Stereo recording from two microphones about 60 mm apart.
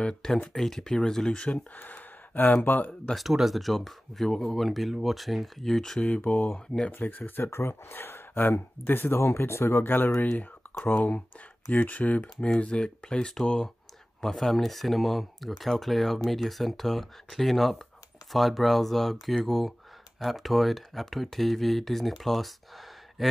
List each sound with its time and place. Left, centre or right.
0.5 s speech: centre
1.8 s speech: left
3.2 s speech: centre; by 6.5 s left
6.5 s speech: centre
6.9 s speech: left
10.3 s a sound: left
10.9 s speech: left; by 23.2 s centre